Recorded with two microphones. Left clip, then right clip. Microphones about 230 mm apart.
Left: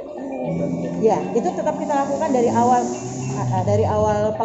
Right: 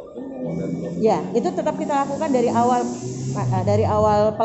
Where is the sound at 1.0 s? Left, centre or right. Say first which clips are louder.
Left 1 dB; right.